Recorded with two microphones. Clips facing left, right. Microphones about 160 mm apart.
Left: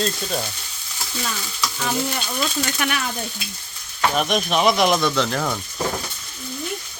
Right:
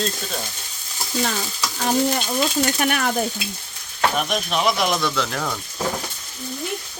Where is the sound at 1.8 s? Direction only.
40° right (ahead or behind).